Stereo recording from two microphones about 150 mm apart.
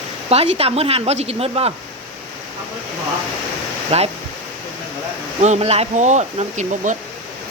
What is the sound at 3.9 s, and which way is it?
Speech, 45° right (ahead or behind).